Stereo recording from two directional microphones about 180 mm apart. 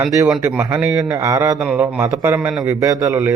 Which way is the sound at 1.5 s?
5° right (ahead or behind).